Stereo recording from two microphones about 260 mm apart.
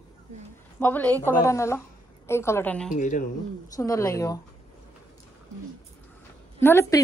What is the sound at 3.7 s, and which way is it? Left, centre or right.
Speech, centre.